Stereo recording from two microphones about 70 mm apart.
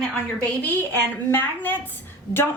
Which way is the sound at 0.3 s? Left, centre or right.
Left.